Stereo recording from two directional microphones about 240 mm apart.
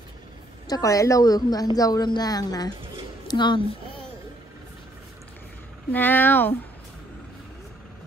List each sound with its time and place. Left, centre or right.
0.7 s a woman's voice: centre
5.9 s a woman's voice: centre